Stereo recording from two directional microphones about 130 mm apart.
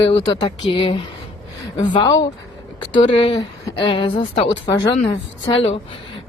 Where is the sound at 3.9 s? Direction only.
40° left (ahead or behind).